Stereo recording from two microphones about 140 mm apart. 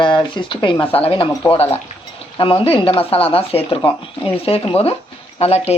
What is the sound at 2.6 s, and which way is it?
Speech, 40° left (ahead or behind).